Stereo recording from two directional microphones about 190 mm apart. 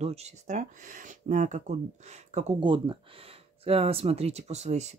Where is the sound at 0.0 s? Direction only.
35° right (ahead or behind).